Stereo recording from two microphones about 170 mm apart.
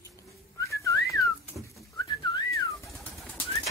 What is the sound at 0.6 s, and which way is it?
Whistling, 20° left (ahead or behind).